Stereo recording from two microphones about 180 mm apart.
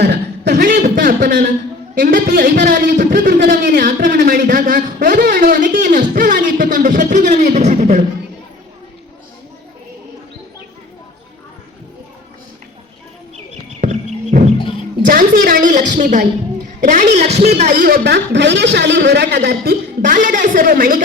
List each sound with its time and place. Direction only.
0.0 s a sound: 65° right (ahead or behind)
2.0 s a man's voice: 50° right (ahead or behind)
2.2 s a man's voice: 65° right (ahead or behind); by 8.0 s 40° right (ahead or behind)
13.3 s a sound: 40° right (ahead or behind)
15.0 s a woman's voice: 50° right (ahead or behind)
17.8 s a woman's voice: 65° right (ahead or behind)